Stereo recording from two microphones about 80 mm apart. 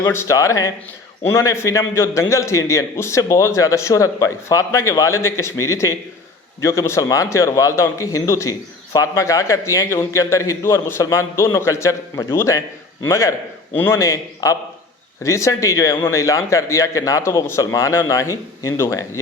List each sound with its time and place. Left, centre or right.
0.0 s a man's voice: left
14.0 s a man's voice: left